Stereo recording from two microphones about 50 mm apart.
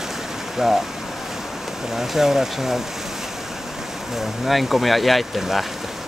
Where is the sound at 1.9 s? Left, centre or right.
Centre.